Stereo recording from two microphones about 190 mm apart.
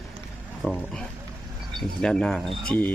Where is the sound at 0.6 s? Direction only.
Centre (ahead or behind).